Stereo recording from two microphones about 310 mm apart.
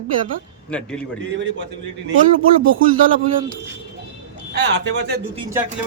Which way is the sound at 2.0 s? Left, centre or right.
Right.